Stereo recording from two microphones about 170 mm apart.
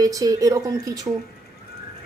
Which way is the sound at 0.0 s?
20° right (ahead or behind).